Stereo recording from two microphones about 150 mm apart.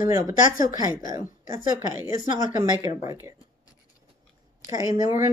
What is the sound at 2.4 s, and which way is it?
Speech, 55° left (ahead or behind).